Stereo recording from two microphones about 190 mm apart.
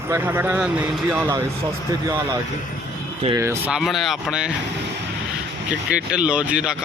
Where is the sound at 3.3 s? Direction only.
15° right (ahead or behind).